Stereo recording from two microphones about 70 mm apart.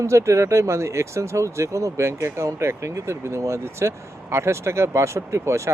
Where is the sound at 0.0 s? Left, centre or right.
Right.